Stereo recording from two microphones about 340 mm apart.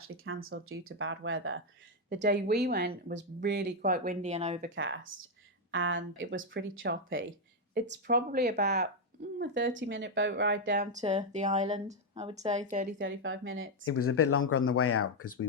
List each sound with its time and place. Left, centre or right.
0.0 s speech: right; by 4.7 s centre
4.7 s speech: right
11.0 s speech: centre; by 13.7 s right
13.8 s speech: left